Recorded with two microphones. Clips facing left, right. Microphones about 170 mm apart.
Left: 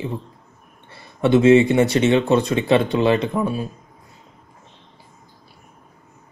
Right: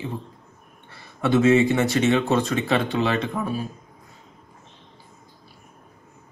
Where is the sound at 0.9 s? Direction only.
25° left (ahead or behind).